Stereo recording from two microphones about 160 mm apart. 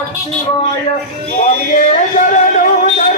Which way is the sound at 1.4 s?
50° left (ahead or behind).